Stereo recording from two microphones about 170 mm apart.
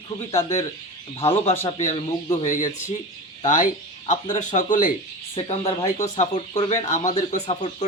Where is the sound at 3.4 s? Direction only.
45° left (ahead or behind).